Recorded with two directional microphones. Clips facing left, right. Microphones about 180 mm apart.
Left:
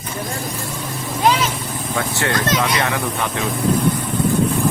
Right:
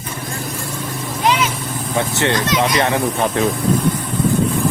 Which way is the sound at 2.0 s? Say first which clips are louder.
Right 3 dB; 20° right (ahead or behind).